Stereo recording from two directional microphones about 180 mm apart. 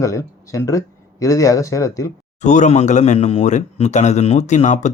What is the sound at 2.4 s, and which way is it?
A man's voice, 40° left (ahead or behind).